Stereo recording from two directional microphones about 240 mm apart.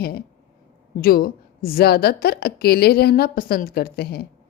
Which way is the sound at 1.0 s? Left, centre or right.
Left.